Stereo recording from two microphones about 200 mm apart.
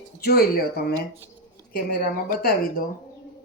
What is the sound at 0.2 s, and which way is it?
Speech, 50° left (ahead or behind).